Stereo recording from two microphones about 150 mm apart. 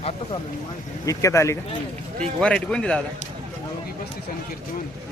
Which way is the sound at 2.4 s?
5° left (ahead or behind).